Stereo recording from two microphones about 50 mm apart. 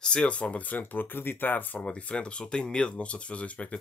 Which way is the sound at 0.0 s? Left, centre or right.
Left.